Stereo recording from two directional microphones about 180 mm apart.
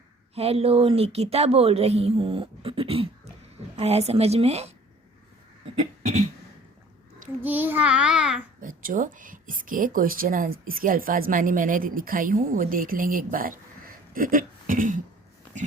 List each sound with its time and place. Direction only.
0.3 s speech: 35° right (ahead or behind)
7.4 s a child's voice: 10° right (ahead or behind)
8.6 s speech: 50° right (ahead or behind)